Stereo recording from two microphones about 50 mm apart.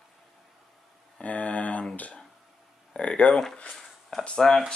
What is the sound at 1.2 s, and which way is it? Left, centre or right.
Speech, left.